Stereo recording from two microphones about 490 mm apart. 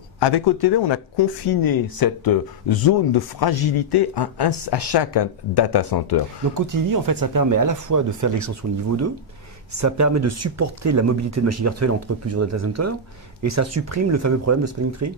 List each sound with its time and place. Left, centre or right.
0.2 s speech: left
6.5 s speech: right